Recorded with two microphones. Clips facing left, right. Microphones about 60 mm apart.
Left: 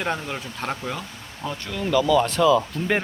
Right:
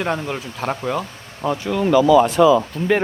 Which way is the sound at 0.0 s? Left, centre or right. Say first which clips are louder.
Right 4 dB; centre.